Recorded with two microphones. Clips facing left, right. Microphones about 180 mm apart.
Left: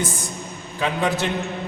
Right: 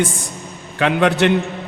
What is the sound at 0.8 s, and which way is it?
Speech, 70° right (ahead or behind).